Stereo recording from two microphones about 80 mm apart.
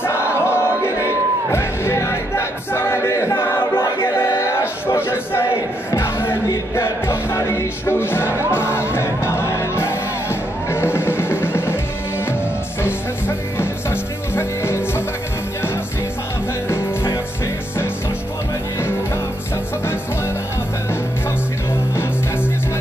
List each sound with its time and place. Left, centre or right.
0.0 s music: left
3.7 s choir: left
4.4 s a sound: left
5.9 s music: left
13.6 s music: left
16.6 s music: left